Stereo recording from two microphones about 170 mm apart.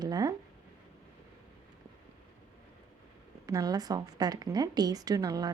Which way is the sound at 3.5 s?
20° right (ahead or behind).